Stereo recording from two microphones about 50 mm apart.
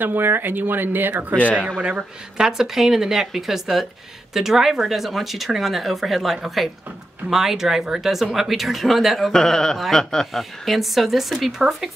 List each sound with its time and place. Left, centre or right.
0.0 s speech: right
1.8 s speech: right; by 9.3 s centre
9.3 s speech: centre